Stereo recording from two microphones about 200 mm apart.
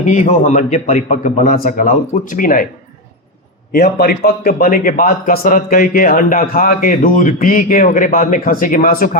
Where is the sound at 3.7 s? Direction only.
50° left (ahead or behind).